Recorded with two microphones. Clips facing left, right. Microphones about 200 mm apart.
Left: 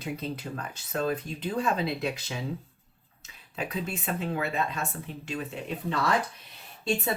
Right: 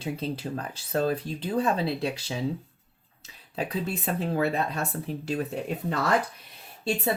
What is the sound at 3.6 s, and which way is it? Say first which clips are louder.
Speech: right 3 dB; 35° right (ahead or behind).